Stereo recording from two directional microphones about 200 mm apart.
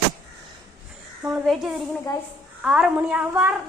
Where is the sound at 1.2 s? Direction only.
Centre (ahead or behind).